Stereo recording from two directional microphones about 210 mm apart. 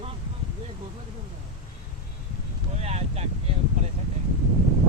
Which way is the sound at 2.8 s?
30° right (ahead or behind).